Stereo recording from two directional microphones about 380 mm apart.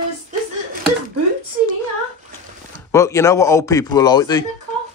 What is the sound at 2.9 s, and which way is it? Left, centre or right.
Speech, centre.